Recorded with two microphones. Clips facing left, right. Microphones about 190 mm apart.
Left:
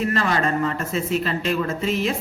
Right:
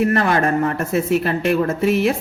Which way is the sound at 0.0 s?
60° right (ahead or behind).